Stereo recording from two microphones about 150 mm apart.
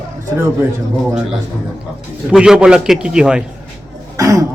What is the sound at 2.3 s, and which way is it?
A man's voice, 5° right (ahead or behind).